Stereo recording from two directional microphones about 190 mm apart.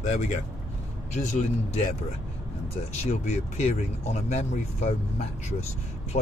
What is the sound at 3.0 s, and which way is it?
Speech, 35° left (ahead or behind).